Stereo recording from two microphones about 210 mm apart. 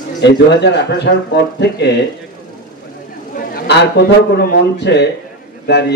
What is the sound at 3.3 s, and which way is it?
A man's voice, 50° left (ahead or behind).